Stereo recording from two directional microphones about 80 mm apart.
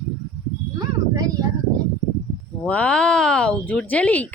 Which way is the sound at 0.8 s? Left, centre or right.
Right.